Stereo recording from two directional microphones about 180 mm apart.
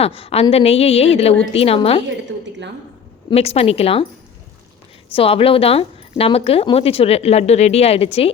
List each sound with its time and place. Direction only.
0.0 s a woman's voice: 30° left (ahead or behind)
3.2 s a woman's voice: 35° left (ahead or behind)
5.1 s a woman's voice: 30° left (ahead or behind)